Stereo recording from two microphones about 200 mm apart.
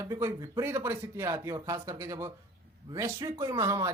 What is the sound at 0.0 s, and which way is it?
A man's voice, 15° right (ahead or behind).